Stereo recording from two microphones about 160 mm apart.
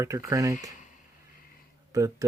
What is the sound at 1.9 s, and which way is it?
Speech, 20° right (ahead or behind).